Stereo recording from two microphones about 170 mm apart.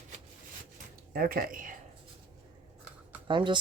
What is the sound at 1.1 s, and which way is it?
Speech, 60° right (ahead or behind).